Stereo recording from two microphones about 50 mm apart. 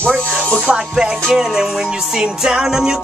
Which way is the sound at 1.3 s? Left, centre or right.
Centre.